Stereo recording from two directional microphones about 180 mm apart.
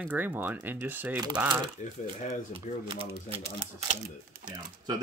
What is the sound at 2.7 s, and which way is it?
Speech, 45° left (ahead or behind).